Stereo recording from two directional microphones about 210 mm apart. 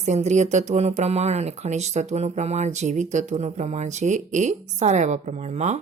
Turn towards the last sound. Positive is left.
turn(degrees=-35)  # may be behind; listen again after turning